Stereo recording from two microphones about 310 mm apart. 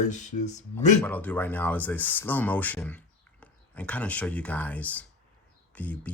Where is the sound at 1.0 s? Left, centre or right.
Centre.